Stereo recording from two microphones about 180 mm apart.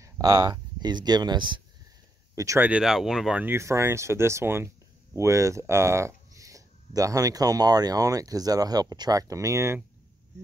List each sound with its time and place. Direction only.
0.0 s speech: 20° right (ahead or behind)